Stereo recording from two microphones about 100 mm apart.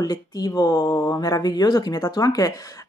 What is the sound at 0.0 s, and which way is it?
Speech, 40° left (ahead or behind).